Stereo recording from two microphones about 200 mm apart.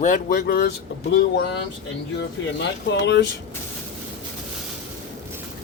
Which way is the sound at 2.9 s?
60° left (ahead or behind).